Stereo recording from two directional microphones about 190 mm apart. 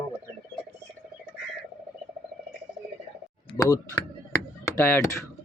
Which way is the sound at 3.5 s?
20° left (ahead or behind).